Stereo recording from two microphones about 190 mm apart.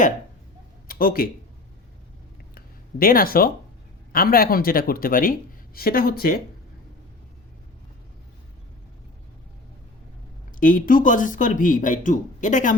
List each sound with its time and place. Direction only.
0.9 s speech: 50° left (ahead or behind)
2.6 s a sound: 50° left (ahead or behind)
4.1 s speech: 50° left (ahead or behind)
10.6 s speech: 45° left (ahead or behind)